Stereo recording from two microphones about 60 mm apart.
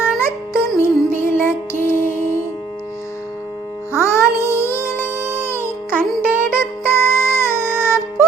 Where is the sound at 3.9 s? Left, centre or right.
Left.